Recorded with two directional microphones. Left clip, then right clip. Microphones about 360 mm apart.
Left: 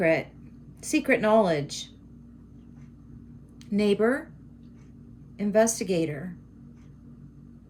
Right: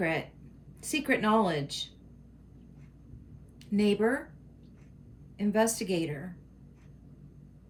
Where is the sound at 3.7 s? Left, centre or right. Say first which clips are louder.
Left 4 dB; centre.